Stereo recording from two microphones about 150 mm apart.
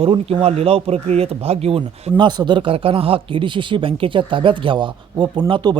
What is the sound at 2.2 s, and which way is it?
Speech, 30° right (ahead or behind).